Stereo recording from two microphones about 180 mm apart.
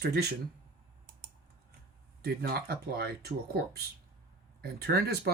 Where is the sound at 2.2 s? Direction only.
60° right (ahead or behind).